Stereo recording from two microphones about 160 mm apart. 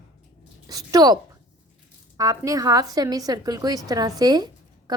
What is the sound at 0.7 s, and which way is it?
Speech, 25° right (ahead or behind).